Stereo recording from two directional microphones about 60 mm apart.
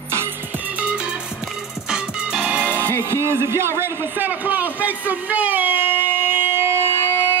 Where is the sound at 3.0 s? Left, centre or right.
Right.